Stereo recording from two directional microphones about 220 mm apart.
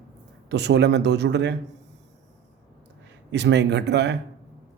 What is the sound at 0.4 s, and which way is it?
Speech, 50° right (ahead or behind).